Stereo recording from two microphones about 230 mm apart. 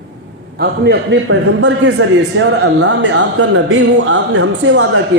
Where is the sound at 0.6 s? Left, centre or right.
Right.